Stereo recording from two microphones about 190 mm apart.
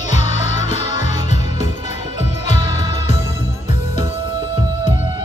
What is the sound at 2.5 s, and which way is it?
Music, 35° left (ahead or behind).